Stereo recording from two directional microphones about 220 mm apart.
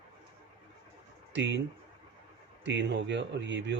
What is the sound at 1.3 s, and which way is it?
Speech, 55° right (ahead or behind).